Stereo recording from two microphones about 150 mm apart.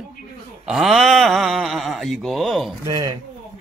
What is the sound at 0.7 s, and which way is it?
Speech, centre (ahead or behind).